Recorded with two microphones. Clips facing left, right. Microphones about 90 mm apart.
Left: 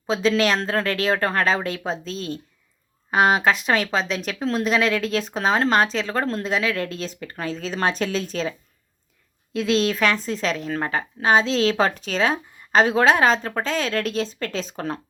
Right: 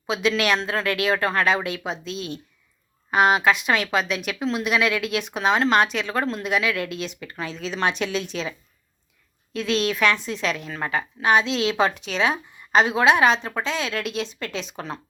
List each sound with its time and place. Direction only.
0.1 s speech: 35° left (ahead or behind)
9.7 s speech: 35° left (ahead or behind)